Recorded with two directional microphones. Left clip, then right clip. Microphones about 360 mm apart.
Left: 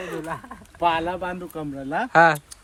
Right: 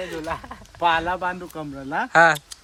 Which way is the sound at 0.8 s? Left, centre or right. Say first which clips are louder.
Right 2 dB; centre.